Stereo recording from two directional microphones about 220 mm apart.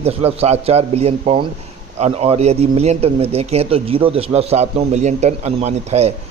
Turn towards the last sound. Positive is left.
turn(degrees=-30)  # may be behind; listen again after turning